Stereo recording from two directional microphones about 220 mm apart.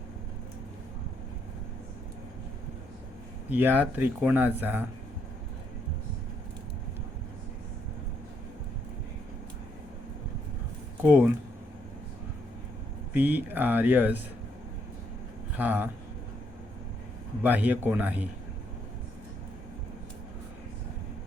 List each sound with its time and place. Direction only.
3.5 s speech: 10° right (ahead or behind)
11.0 s speech: 5° right (ahead or behind)
13.1 s speech: 10° right (ahead or behind)
15.5 s speech: 10° right (ahead or behind)
17.4 s speech: 10° right (ahead or behind)